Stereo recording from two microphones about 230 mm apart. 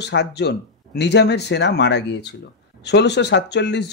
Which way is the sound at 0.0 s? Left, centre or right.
Left.